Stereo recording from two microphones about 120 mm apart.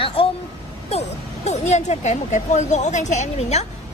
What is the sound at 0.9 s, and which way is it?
Speech, 65° left (ahead or behind).